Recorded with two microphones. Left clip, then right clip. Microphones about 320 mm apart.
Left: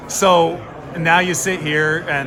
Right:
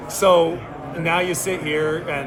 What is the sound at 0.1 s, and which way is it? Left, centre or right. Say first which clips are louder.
Speech: left 2 dB; left.